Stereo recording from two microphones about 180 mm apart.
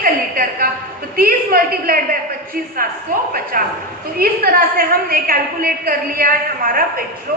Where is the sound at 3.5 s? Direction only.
55° right (ahead or behind).